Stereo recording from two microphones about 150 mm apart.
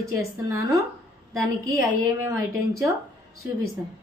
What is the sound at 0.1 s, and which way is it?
A woman's voice, 20° right (ahead or behind).